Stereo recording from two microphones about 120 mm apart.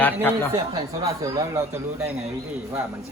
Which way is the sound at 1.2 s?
30° right (ahead or behind).